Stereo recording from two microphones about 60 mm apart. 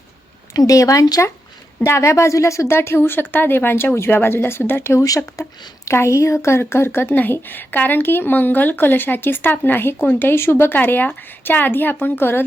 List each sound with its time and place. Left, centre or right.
0.5 s speech: left
1.8 s a woman's voice: left
2.7 s speech: left
4.9 s a woman's voice: left